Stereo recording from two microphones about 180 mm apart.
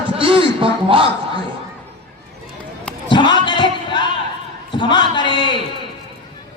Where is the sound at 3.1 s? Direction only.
25° left (ahead or behind).